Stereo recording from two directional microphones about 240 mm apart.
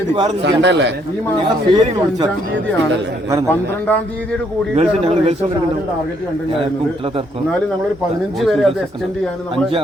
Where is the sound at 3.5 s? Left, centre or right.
Centre.